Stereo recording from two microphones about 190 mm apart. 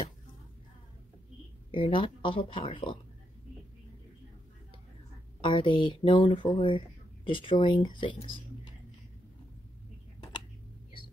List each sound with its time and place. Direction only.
1.7 s speech: 25° left (ahead or behind)
5.4 s speech: 25° left (ahead or behind)